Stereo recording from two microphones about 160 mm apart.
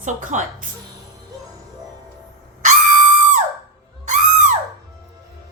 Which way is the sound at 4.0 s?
50° right (ahead or behind).